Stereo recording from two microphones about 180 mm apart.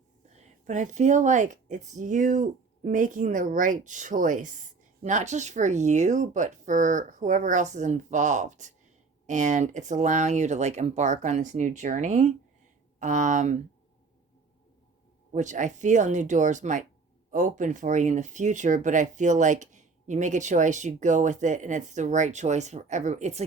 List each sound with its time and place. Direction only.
0.6 s speech: 45° right (ahead or behind)
15.3 s speech: 45° right (ahead or behind)